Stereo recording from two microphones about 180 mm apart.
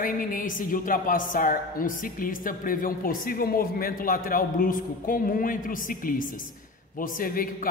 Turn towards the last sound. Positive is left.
turn(degrees=50)  # may be behind; listen again after turning